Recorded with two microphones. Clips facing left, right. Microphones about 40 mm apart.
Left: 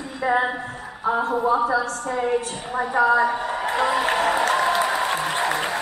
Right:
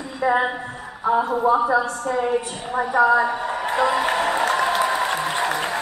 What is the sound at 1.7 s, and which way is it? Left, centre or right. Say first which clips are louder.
Speech: right 2 dB; right.